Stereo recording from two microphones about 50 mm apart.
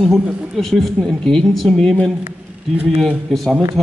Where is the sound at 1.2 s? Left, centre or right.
Centre.